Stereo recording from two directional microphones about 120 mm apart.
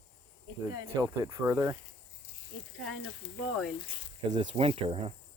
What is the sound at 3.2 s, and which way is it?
Speech, 50° left (ahead or behind).